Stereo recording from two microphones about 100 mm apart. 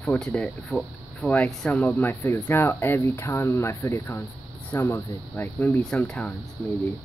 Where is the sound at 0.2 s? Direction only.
5° left (ahead or behind).